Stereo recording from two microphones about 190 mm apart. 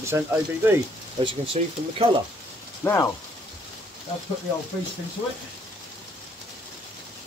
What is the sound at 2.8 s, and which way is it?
Speech, 15° left (ahead or behind).